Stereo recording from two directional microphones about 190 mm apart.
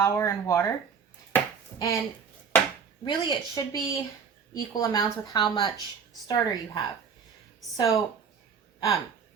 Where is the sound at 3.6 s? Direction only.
20° left (ahead or behind).